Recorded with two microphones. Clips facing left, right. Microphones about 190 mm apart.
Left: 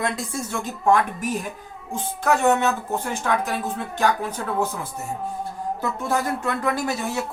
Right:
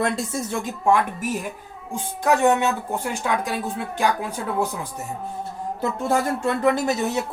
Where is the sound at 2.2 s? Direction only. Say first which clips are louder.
Right 1 dB; 15° right (ahead or behind).